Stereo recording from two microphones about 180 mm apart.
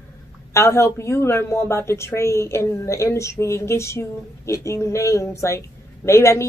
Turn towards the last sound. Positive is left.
turn(degrees=15)  # may be behind; listen again after turning